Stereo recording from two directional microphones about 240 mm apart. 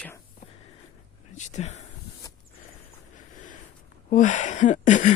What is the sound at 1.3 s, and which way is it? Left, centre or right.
Speech, left.